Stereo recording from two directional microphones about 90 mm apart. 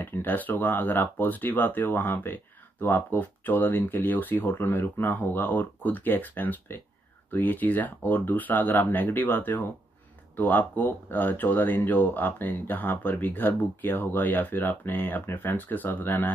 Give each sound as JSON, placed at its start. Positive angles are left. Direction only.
{"t": 0.0, "sound": "speech", "side_deg": 20}